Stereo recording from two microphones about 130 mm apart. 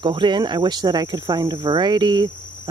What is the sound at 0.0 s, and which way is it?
Speech, 35° right (ahead or behind).